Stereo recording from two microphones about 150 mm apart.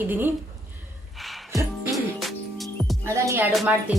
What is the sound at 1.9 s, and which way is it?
Music, centre (ahead or behind).